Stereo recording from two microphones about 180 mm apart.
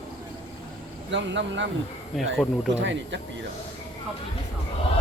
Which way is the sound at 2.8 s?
90° right.